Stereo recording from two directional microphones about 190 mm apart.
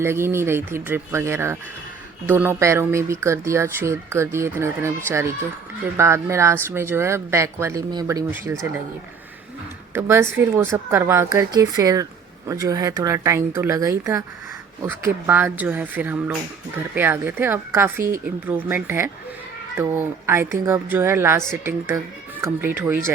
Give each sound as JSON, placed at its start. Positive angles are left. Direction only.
{"t": 0.0, "sound": "speech", "side_deg": -15}
{"t": 9.9, "sound": "speech", "side_deg": -10}